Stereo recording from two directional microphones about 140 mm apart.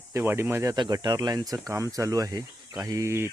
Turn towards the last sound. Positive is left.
turn(degrees=-20)  # may be behind; listen again after turning